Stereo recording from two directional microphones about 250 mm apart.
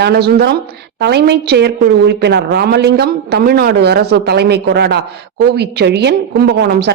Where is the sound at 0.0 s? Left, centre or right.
Right.